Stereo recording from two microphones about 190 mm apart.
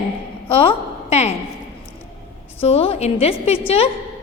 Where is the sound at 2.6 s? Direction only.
30° left (ahead or behind).